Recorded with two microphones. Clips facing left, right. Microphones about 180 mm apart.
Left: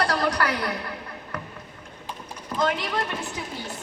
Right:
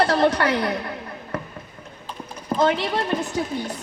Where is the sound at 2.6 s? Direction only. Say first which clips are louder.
Right 4 dB; 30° right (ahead or behind).